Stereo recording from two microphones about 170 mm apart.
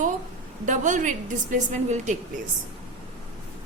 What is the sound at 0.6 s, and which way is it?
A woman's voice, 45° right (ahead or behind).